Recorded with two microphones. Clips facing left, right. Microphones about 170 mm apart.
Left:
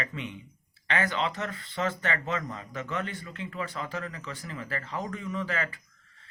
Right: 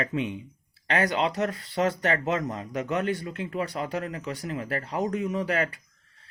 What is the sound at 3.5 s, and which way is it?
Speech, 45° right (ahead or behind).